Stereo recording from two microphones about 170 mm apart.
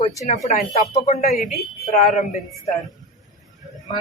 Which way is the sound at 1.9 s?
40° left (ahead or behind).